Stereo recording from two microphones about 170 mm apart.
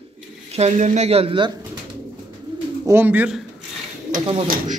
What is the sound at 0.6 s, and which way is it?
Speech, 40° right (ahead or behind).